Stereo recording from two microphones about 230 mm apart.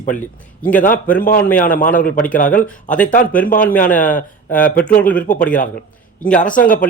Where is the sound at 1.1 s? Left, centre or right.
Left.